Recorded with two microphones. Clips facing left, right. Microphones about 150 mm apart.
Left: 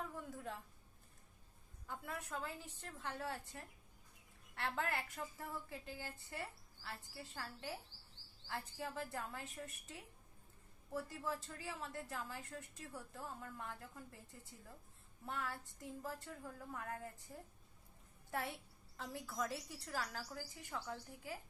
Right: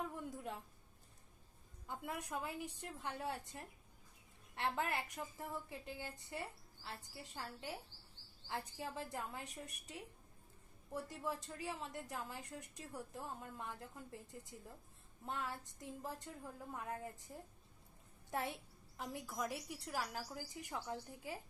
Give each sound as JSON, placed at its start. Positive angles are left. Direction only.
{"t": 1.9, "sound": "a woman's voice", "side_deg": -20}
{"t": 18.3, "sound": "a woman's voice", "side_deg": -20}